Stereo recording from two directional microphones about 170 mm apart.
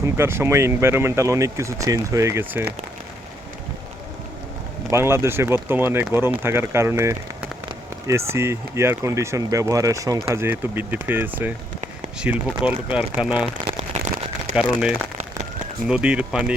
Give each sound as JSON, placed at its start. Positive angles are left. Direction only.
{"t": 0.0, "sound": "speech", "side_deg": -15}
{"t": 4.9, "sound": "speech", "side_deg": -15}
{"t": 8.3, "sound": "speech", "side_deg": -15}
{"t": 13.9, "sound": "a sound", "side_deg": -45}
{"t": 14.5, "sound": "speech", "side_deg": -5}